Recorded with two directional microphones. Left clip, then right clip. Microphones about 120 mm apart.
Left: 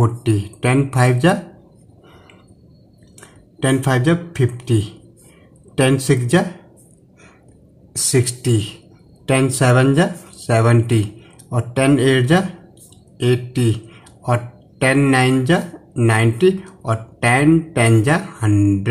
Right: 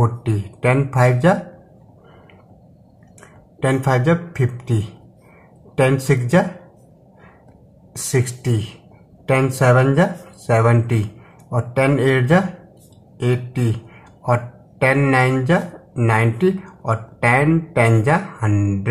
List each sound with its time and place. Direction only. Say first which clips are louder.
0.0 s speech: left 3 dB; 30° left (ahead or behind)
3.6 s a man's voice: even; 35° left (ahead or behind)
8.1 s a man's voice: left 3 dB; 25° left (ahead or behind)
14.2 s a man's voice: right 1 dB; 30° left (ahead or behind)